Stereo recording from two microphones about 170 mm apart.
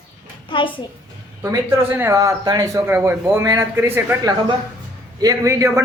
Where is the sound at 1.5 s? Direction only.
15° right (ahead or behind).